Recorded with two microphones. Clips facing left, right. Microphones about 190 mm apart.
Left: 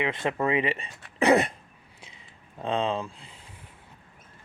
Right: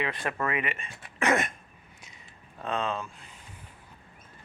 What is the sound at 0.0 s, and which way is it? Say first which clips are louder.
Speech: left 4 dB; 20° left (ahead or behind).